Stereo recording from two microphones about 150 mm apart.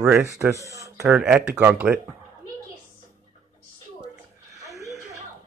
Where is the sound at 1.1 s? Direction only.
10° right (ahead or behind).